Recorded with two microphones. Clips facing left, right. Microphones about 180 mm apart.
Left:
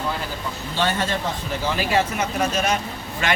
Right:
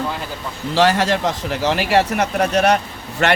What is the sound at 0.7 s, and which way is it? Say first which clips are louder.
Speech: right 8 dB; 90° right.